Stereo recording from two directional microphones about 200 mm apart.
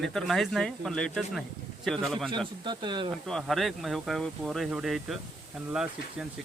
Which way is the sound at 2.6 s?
20° right (ahead or behind).